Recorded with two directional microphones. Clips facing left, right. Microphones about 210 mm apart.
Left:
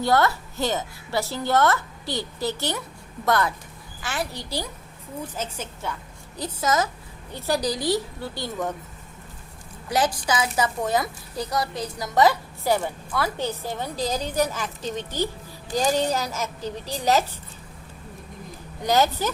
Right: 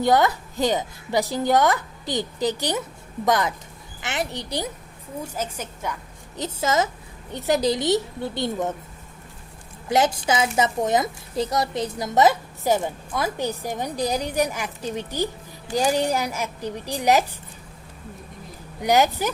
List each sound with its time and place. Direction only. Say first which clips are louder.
0.0 s a woman's voice: right 2 dB; 15° right (ahead or behind)
9.9 s a woman's voice: right 3 dB; 25° right (ahead or behind)
18.8 s a woman's voice: right 2 dB; 15° right (ahead or behind)